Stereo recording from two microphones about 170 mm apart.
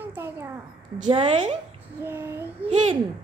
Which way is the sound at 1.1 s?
30° right (ahead or behind).